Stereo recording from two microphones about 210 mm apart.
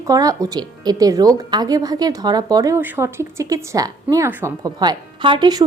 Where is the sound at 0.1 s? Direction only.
15° right (ahead or behind).